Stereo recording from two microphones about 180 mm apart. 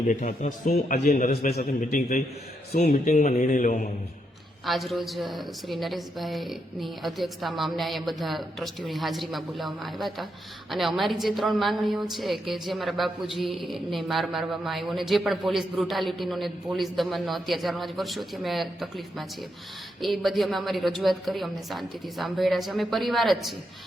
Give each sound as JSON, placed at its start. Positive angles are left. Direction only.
{"t": 0.1, "sound": "a man's voice", "side_deg": 45}
{"t": 4.6, "sound": "a woman's voice", "side_deg": 0}